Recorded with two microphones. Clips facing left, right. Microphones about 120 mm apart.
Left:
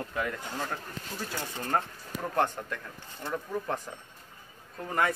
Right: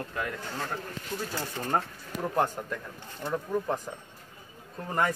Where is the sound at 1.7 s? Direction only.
5° right (ahead or behind).